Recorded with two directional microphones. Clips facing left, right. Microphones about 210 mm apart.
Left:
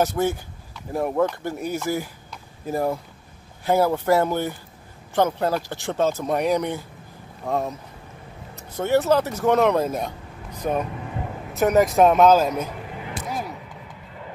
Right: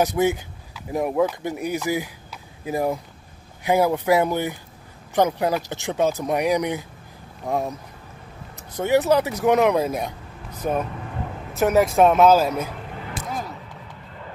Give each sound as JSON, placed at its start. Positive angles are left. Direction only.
{"t": 0.0, "sound": "speech", "side_deg": -15}
{"t": 1.9, "sound": "a sound", "side_deg": -10}
{"t": 3.6, "sound": "speech", "side_deg": -15}
{"t": 8.7, "sound": "speech", "side_deg": -15}
{"t": 13.2, "sound": "vehicle", "side_deg": 5}